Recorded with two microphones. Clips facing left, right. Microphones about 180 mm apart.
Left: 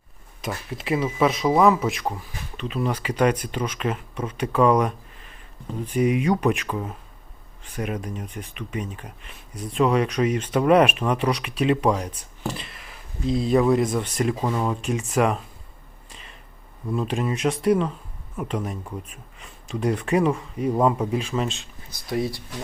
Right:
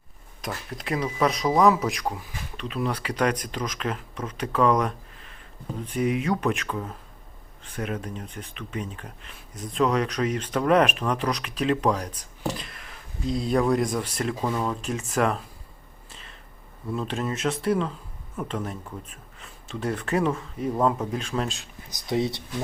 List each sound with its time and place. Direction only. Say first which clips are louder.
0.4 s speech: left 3 dB; 5° left (ahead or behind)
16.9 s speech: left 3 dB; 10° left (ahead or behind)
21.9 s speech: even; 20° right (ahead or behind)